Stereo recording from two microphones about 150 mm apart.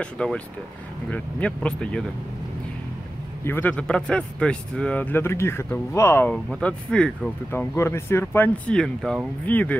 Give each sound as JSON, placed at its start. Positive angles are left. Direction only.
{"t": 0.0, "sound": "speech", "side_deg": 5}
{"t": 3.4, "sound": "speech", "side_deg": 15}
{"t": 7.5, "sound": "speech", "side_deg": 15}